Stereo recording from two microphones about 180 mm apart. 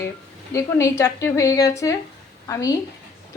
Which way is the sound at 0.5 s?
15° left (ahead or behind).